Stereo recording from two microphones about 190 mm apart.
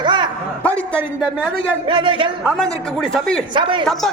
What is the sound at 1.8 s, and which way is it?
Speech, 25° right (ahead or behind).